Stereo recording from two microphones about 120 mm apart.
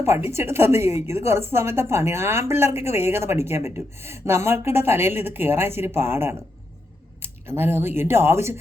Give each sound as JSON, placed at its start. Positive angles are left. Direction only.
{"t": 0.0, "sound": "a woman's voice", "side_deg": -20}